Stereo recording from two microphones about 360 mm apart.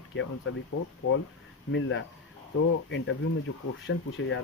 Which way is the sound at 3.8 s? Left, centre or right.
Left.